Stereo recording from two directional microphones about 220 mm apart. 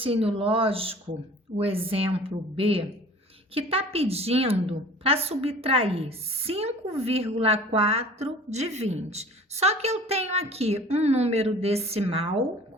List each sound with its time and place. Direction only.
0.0 s a woman's voice: 25° right (ahead or behind)